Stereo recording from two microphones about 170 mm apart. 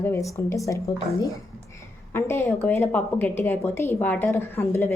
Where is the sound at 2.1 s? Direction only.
15° left (ahead or behind).